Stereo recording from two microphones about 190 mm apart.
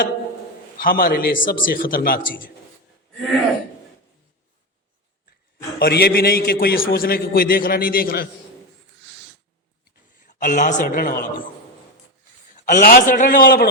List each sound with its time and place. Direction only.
0.8 s a man's voice: 50° left (ahead or behind)
5.8 s a man's voice: 55° left (ahead or behind)
10.2 s a man's voice: 45° left (ahead or behind)
12.6 s a man's voice: 45° left (ahead or behind)